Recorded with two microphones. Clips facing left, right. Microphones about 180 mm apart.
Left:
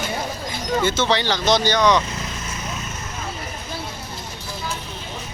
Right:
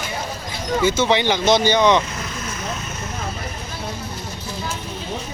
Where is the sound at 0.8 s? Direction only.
10° right (ahead or behind).